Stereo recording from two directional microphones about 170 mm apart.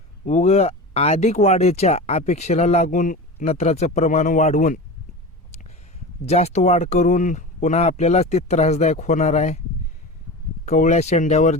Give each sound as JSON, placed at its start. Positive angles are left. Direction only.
{"t": 0.3, "sound": "speech", "side_deg": 40}
{"t": 6.2, "sound": "speech", "side_deg": 40}
{"t": 10.7, "sound": "speech", "side_deg": 45}